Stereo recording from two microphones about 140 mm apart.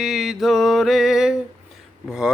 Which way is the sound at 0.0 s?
5° right (ahead or behind).